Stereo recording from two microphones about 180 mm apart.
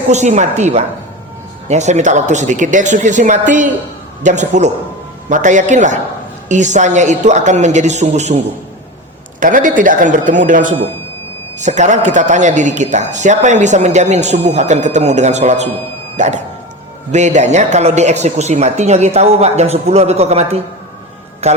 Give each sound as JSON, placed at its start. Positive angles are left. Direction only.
{"t": 0.1, "sound": "a woman's voice", "side_deg": -40}
{"t": 9.4, "sound": "a woman's voice", "side_deg": -45}